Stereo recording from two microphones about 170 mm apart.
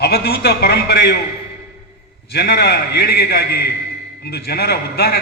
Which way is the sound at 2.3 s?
70° left (ahead or behind).